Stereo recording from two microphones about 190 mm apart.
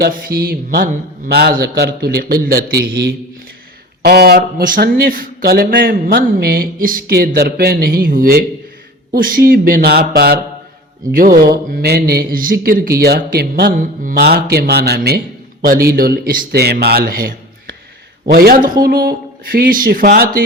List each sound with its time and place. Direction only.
0.0 s a man's voice: 50° right (ahead or behind)